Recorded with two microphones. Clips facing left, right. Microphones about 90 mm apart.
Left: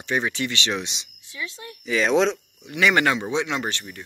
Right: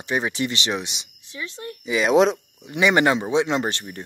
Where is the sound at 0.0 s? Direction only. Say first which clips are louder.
Right 1 dB; 15° right (ahead or behind).